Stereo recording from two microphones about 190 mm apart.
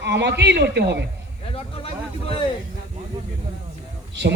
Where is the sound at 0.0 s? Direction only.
65° right (ahead or behind).